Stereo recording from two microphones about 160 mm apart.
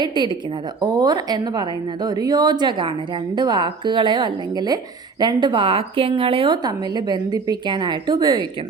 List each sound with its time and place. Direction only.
0.0 s speech: 30° right (ahead or behind)